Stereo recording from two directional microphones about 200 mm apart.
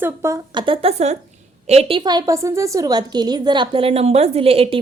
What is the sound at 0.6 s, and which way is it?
A woman's voice, 30° right (ahead or behind).